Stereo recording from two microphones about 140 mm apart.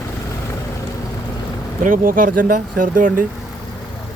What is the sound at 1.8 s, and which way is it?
Speech, 80° right.